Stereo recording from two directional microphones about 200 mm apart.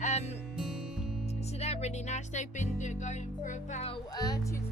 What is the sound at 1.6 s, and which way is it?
Music, 35° left (ahead or behind).